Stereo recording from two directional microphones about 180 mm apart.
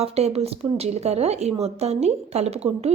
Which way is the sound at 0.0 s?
35° right (ahead or behind).